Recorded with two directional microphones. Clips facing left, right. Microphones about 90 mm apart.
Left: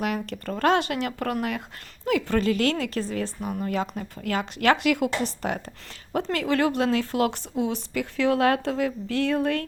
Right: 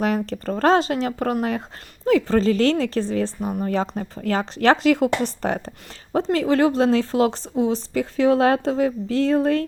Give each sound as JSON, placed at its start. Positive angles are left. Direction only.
{"t": 0.0, "sound": "speech", "side_deg": -35}
{"t": 6.1, "sound": "a woman's voice", "side_deg": -25}